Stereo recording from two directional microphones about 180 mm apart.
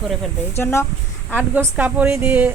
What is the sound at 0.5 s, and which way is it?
Speech, 15° left (ahead or behind).